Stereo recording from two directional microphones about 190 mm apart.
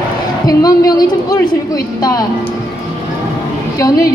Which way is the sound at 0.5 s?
20° left (ahead or behind).